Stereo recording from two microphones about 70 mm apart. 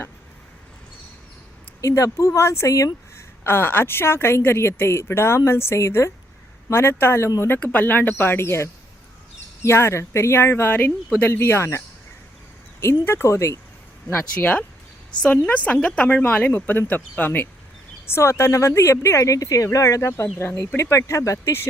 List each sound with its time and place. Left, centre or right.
1.8 s speech: left
3.4 s a woman's voice: left
7.6 s a woman's voice: left
12.8 s a woman's voice: left
14.3 s a woman's voice: left
18.1 s speech: left
20.2 s a woman's voice: left
20.6 s speech: left